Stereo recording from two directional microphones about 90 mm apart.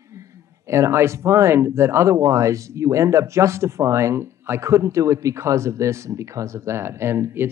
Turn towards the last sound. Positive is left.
turn(degrees=-25)  # may be behind; listen again after turning